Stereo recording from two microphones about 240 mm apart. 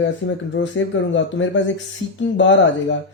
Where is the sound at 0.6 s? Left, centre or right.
Left.